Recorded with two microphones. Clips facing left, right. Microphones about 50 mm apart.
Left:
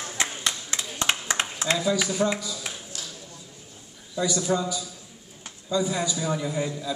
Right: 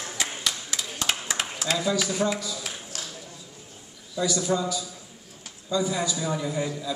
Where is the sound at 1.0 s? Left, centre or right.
Left.